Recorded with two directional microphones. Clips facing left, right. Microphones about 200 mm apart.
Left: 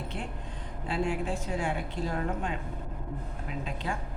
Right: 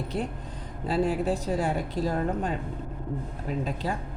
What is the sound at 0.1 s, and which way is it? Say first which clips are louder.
A woman's voice: right 7 dB; 35° right (ahead or behind).